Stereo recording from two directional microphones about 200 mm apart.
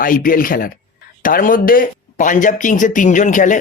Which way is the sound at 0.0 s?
45° left (ahead or behind).